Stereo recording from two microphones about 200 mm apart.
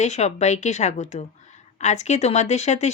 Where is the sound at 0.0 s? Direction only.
35° left (ahead or behind).